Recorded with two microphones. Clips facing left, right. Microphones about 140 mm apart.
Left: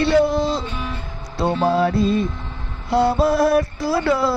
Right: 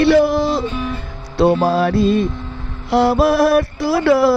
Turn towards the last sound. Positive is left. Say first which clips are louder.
# right 5 dB
turn(degrees=-70)  # may be behind; listen again after turning